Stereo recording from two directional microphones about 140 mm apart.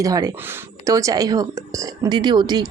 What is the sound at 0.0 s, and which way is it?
Speech, 25° right (ahead or behind).